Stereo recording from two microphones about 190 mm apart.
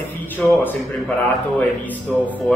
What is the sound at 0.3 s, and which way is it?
Speech, 10° left (ahead or behind).